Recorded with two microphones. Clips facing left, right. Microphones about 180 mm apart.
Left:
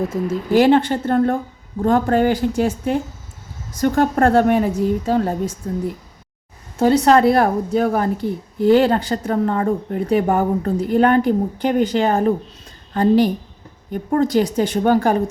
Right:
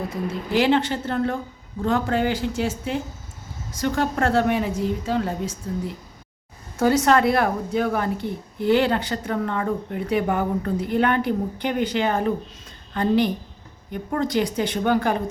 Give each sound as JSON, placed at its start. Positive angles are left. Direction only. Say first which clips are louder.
{"t": 0.1, "sound": "a woman's voice", "louder": "left 7 dB", "side_deg": 45}
{"t": 7.0, "sound": "a woman's voice", "louder": "left 5 dB", "side_deg": 35}